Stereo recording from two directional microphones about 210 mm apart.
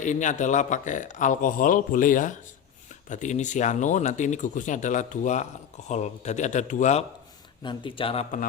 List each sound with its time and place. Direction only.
0.0 s speech: 35° left (ahead or behind)
7.6 s a man's voice: 25° left (ahead or behind)